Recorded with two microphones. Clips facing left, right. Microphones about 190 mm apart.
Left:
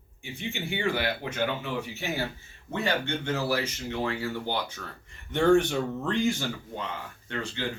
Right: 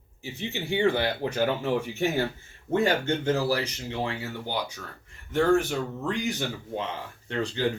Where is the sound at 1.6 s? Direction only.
50° right (ahead or behind).